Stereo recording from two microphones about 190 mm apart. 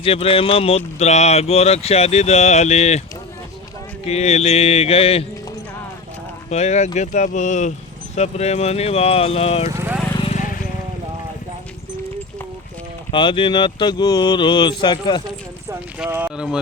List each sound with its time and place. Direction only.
0.0 s speech: 30° left (ahead or behind)
4.0 s speech: 35° left (ahead or behind)
6.5 s speech: 35° left (ahead or behind)
9.7 s speech: 10° right (ahead or behind)
10.2 s vehicle: 35° left (ahead or behind)
13.1 s speech: 25° left (ahead or behind)
16.0 s speech: 10° right (ahead or behind)